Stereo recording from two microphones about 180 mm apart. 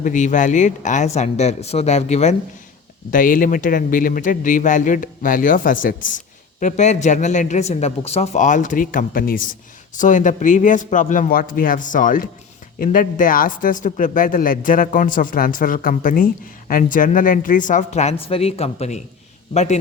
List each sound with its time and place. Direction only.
0.0 s speech: 45° left (ahead or behind)
3.1 s a man's voice: 50° left (ahead or behind)